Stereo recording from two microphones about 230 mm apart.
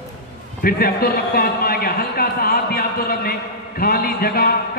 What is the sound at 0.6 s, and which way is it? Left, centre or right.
A man's voice, left.